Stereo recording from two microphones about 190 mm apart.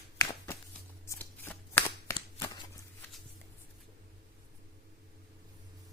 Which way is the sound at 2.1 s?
25° left (ahead or behind).